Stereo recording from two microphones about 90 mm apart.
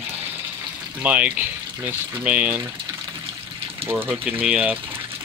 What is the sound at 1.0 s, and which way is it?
Speech, 15° right (ahead or behind).